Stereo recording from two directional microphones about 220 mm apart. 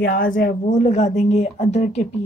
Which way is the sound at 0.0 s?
40° left (ahead or behind).